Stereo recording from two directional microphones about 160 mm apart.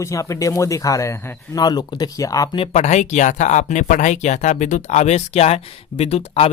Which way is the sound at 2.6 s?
45° left (ahead or behind).